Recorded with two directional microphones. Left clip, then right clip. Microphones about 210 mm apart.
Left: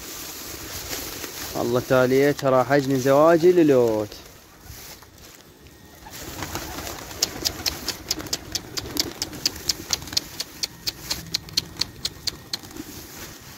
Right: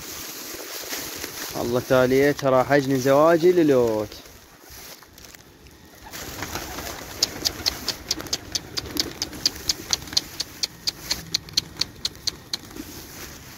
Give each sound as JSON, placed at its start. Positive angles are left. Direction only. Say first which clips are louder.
{"t": 1.6, "sound": "speech", "louder": "left 2 dB", "side_deg": 5}
{"t": 1.9, "sound": "speech", "louder": "right 1 dB", "side_deg": -5}
{"t": 6.4, "sound": "pigeon", "louder": "even", "side_deg": -45}
{"t": 7.4, "sound": "engine", "louder": "right 1 dB", "side_deg": 0}
{"t": 8.3, "sound": "bird", "louder": "right 1 dB", "side_deg": 0}
{"t": 11.8, "sound": "a sound", "louder": "right 1 dB", "side_deg": 5}